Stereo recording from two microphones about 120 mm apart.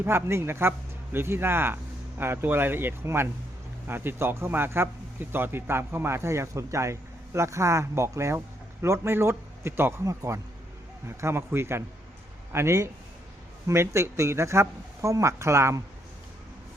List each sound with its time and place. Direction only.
0.0 s a man's voice: 20° right (ahead or behind)